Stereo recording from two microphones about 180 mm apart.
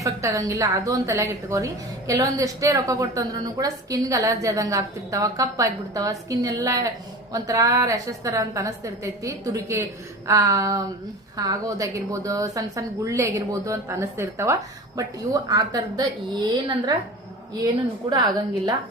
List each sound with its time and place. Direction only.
0.0 s a woman's voice: 15° right (ahead or behind)